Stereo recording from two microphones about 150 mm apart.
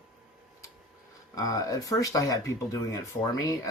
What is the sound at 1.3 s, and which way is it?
Speech, 25° left (ahead or behind).